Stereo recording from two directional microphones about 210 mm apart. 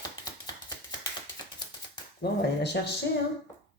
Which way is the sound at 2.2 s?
50° left (ahead or behind).